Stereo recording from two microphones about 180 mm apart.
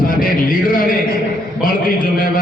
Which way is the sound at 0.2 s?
50° left (ahead or behind).